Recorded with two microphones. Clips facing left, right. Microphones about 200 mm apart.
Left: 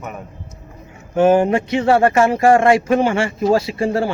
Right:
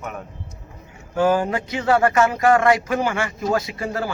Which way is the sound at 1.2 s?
25° left (ahead or behind).